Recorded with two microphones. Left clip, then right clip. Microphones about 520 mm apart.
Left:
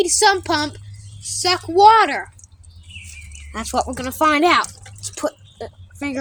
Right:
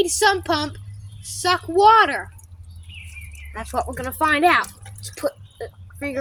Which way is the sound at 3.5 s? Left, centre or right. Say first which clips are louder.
Left 4 dB; centre.